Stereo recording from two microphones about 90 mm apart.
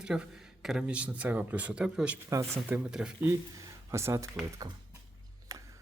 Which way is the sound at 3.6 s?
30° right (ahead or behind).